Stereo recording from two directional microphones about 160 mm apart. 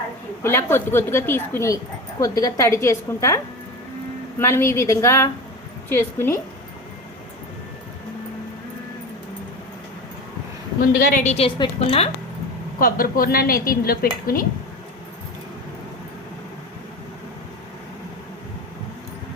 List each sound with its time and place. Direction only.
0.4 s a woman's voice: 15° left (ahead or behind)
10.8 s a woman's voice: 60° left (ahead or behind); by 12.0 s 30° left (ahead or behind)
12.8 s a woman's voice: 65° left (ahead or behind)